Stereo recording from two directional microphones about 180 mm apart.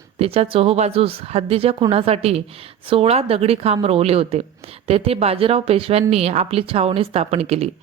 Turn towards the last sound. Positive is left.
turn(degrees=-35)  # may be behind; listen again after turning